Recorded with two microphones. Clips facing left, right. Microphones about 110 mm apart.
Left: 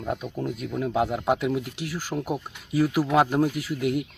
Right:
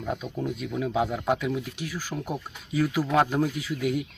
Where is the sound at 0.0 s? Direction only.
10° left (ahead or behind).